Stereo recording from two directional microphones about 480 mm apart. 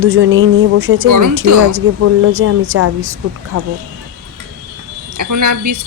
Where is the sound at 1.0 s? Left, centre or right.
Right.